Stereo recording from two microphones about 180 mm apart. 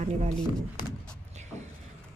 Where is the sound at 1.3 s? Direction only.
40° right (ahead or behind).